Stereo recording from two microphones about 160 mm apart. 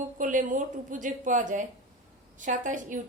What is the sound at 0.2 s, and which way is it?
A woman's voice, 55° right (ahead or behind).